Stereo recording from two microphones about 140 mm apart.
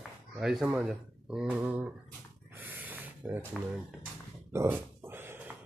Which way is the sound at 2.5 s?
10° right (ahead or behind).